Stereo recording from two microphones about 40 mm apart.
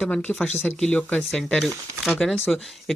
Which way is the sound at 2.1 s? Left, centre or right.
Centre.